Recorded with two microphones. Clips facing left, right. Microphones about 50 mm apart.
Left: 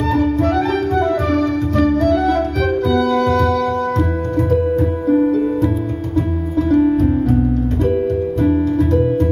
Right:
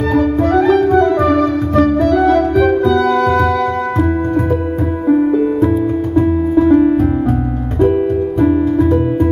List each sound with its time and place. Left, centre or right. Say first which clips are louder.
0.1 s music: right 4 dB; right
5.0 s music: right 4 dB; right
8.5 s music: right 2 dB; centre